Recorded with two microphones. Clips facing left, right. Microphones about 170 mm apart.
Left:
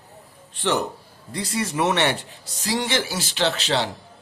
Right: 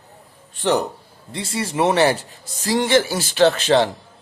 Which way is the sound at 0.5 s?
40° right (ahead or behind).